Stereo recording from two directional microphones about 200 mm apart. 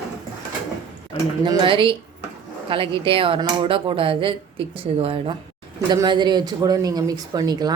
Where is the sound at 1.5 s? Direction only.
25° right (ahead or behind).